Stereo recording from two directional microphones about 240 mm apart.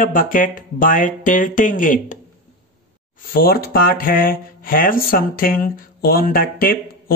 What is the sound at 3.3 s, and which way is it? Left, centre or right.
Speech, left.